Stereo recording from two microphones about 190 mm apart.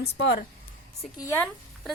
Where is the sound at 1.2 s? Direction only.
15° left (ahead or behind).